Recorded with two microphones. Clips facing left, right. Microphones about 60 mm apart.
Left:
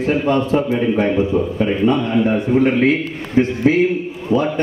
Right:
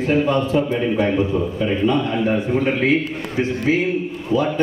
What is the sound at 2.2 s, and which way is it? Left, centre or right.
A man's voice, left.